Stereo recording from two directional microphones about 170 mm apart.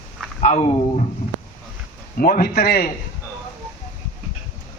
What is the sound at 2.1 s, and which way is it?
Speech, 60° left (ahead or behind).